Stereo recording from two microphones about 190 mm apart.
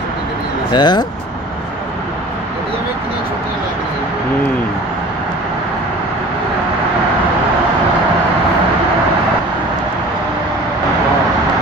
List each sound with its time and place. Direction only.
0.7 s speech: 20° left (ahead or behind)